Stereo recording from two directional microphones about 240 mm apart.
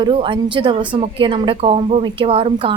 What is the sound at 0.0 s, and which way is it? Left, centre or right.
A woman's voice, right.